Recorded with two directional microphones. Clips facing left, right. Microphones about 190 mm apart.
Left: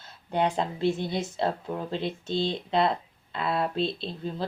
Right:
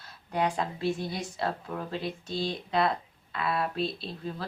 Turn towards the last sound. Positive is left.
turn(degrees=25)  # may be behind; listen again after turning